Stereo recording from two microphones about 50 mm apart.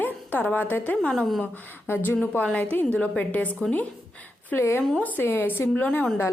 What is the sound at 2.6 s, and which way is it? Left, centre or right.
Speech, left.